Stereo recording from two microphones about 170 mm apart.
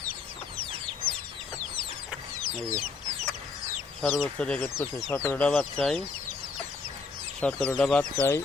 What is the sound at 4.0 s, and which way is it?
Speech, 5° left (ahead or behind).